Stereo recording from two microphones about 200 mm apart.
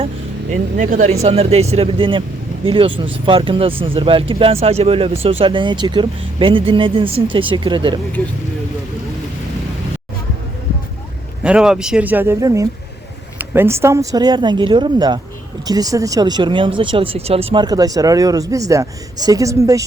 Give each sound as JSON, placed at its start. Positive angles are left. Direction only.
{"t": 0.8, "sound": "speech", "side_deg": -40}
{"t": 11.4, "sound": "speech", "side_deg": -5}